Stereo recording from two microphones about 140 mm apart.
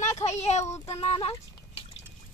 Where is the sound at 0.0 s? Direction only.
55° left (ahead or behind).